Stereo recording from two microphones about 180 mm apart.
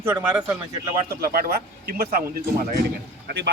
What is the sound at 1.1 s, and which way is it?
Speech, 55° right (ahead or behind).